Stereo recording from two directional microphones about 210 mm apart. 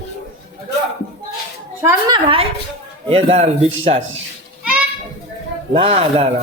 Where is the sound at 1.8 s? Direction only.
15° right (ahead or behind).